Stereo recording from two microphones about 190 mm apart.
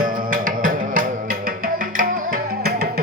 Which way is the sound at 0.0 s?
45° right (ahead or behind).